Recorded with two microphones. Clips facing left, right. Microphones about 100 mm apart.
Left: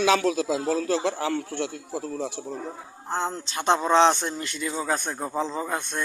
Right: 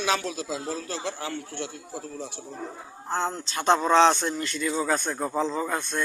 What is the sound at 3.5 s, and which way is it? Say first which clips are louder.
Speech: right 1 dB; 20° left (ahead or behind).